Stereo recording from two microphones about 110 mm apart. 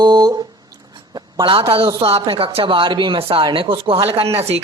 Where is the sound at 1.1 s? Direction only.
50° right (ahead or behind).